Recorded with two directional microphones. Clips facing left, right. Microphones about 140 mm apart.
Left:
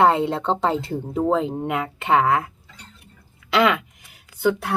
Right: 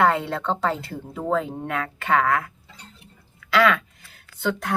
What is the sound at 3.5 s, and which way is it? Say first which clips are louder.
Speech: left 1 dB; 20° left (ahead or behind).